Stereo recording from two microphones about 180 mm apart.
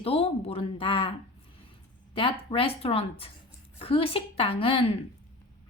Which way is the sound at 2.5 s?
30° left (ahead or behind).